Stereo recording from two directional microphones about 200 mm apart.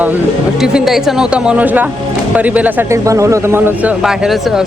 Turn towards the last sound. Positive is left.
turn(degrees=0)  # may be behind; listen again after turning